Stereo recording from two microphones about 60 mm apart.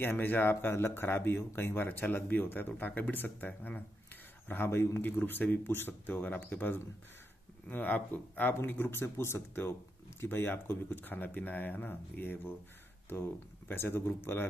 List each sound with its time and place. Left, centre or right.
0.0 s speech: left
8.5 s speech: left